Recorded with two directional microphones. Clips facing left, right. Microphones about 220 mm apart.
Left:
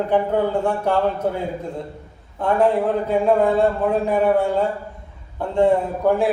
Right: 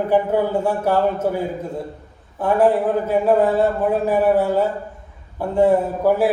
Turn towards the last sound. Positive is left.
turn(degrees=-5)  # may be behind; listen again after turning